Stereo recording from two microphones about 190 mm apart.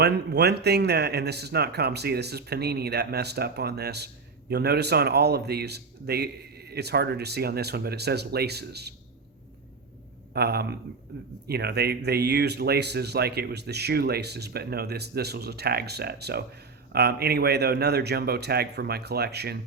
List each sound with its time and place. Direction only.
0.0 s speech: 60° right (ahead or behind)
10.3 s speech: 55° right (ahead or behind)